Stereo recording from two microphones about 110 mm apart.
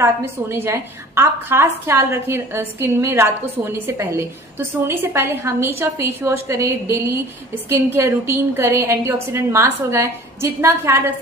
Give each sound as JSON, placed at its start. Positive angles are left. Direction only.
{"t": 0.0, "sound": "a woman's voice", "side_deg": -20}